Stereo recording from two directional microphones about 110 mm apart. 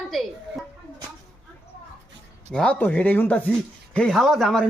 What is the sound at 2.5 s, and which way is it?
A woman's voice, 10° left (ahead or behind).